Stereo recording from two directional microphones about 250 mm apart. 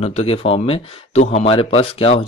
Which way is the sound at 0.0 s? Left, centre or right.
Left.